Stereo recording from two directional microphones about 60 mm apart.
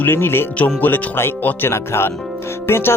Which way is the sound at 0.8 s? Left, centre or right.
Left.